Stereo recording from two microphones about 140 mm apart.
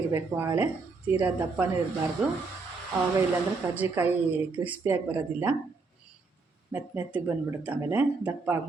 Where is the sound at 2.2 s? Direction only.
5° right (ahead or behind).